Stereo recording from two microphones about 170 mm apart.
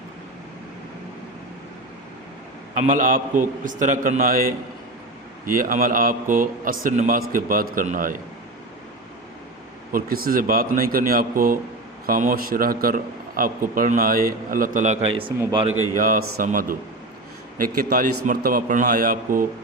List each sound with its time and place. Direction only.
2.7 s a man's voice: 50° right (ahead or behind)
9.9 s a man's voice: 60° right (ahead or behind); by 15.2 s 40° right (ahead or behind)
16.0 s a man's voice: 55° right (ahead or behind)